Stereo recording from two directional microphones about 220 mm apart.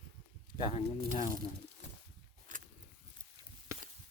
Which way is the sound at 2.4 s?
35° right (ahead or behind).